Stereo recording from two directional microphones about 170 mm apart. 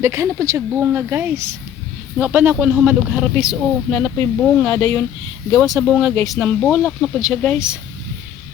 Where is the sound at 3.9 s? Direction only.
5° left (ahead or behind).